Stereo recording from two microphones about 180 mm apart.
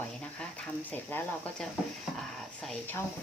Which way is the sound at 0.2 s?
5° left (ahead or behind).